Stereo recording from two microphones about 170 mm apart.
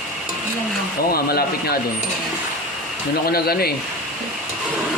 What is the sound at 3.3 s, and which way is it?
Speech, 65° left (ahead or behind).